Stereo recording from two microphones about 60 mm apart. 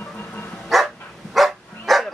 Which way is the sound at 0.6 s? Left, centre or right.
Centre.